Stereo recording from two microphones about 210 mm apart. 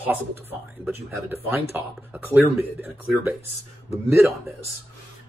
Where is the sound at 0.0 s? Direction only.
10° right (ahead or behind).